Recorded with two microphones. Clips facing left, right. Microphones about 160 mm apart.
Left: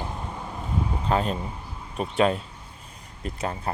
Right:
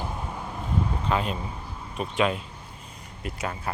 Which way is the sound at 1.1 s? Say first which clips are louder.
Left 4 dB; 35° left (ahead or behind).